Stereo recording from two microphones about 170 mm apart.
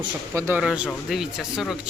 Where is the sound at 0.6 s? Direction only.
5° right (ahead or behind).